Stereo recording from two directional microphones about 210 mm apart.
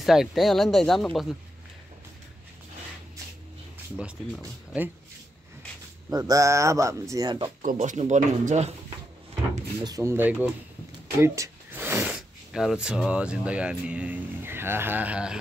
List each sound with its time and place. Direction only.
0.0 s speech: centre (ahead or behind)
4.4 s a man's voice: 10° right (ahead or behind)
6.0 s a man's voice: 15° right (ahead or behind)
7.6 s speech: 35° right (ahead or behind)
9.8 s a man's voice: 15° right (ahead or behind)